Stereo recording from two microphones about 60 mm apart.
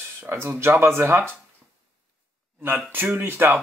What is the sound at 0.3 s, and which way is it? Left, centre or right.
Speech, right.